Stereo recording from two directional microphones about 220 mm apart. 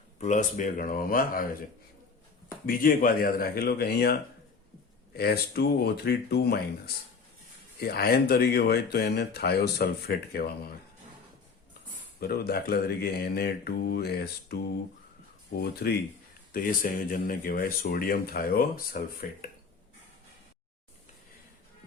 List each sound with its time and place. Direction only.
0.2 s speech: 35° left (ahead or behind)
2.6 s speech: 40° left (ahead or behind)
12.3 s speech: 45° left (ahead or behind)
15.6 s speech: 45° left (ahead or behind)